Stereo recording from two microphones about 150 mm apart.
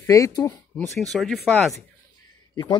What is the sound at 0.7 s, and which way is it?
Speech, centre (ahead or behind).